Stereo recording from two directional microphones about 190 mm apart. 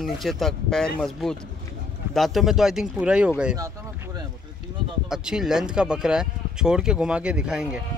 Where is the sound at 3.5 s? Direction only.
20° right (ahead or behind).